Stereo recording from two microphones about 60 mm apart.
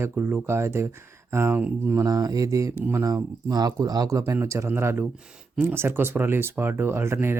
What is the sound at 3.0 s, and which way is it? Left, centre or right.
Speech, right.